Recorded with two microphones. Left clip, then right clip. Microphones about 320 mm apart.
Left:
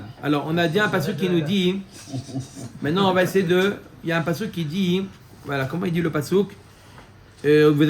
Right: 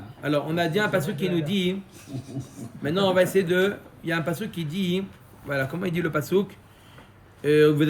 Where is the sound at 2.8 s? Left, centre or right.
Centre.